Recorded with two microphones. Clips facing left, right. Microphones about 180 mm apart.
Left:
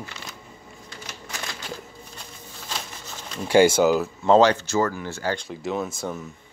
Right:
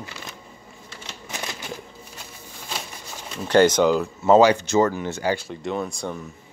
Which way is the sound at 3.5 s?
10° left (ahead or behind).